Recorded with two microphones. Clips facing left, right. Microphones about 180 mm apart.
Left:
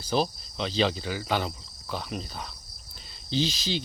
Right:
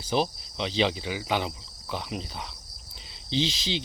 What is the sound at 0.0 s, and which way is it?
Insect, 20° right (ahead or behind).